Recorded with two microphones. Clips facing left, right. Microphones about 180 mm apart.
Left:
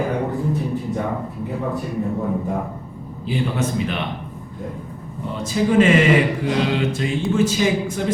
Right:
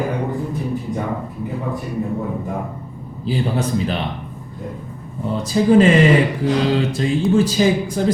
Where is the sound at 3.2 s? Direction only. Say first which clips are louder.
Right 2 dB; 35° right (ahead or behind).